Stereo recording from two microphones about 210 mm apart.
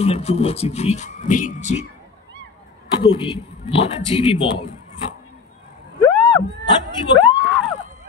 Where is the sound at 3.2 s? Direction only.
25° left (ahead or behind).